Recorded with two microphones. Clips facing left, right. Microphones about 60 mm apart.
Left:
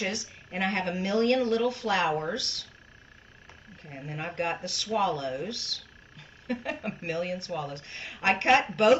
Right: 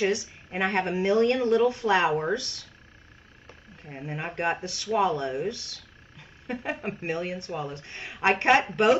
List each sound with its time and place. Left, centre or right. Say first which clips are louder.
0.0 s speech: right 7 dB; right
3.8 s speech: right 2 dB; right